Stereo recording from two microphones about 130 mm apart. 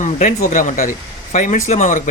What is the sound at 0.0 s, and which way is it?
Speech, 80° left.